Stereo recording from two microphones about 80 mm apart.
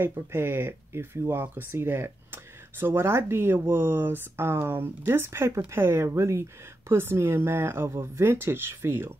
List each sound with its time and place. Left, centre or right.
0.0 s speech: right